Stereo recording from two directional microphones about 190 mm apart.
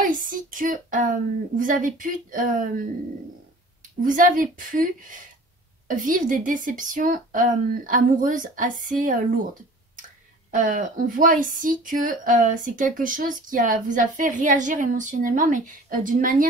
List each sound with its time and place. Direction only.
0.0 s speech: 45° right (ahead or behind)
4.0 s speech: 45° right (ahead or behind)